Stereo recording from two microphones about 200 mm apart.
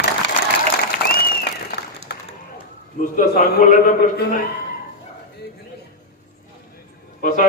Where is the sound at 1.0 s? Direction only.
50° left (ahead or behind).